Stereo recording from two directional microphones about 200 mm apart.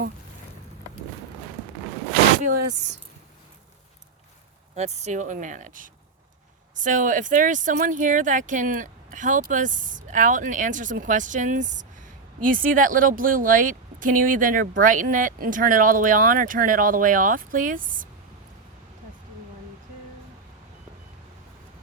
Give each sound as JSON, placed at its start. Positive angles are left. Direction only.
{"t": 4.7, "sound": "speech", "side_deg": -35}